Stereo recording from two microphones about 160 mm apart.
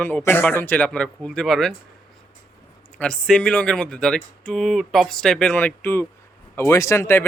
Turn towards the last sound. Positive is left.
turn(degrees=15)  # may be behind; listen again after turning